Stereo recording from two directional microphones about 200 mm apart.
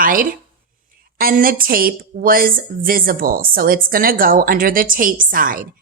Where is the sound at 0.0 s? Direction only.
45° right (ahead or behind).